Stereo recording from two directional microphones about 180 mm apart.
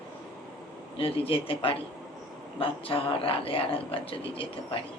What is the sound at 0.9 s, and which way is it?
Speech, 30° left (ahead or behind).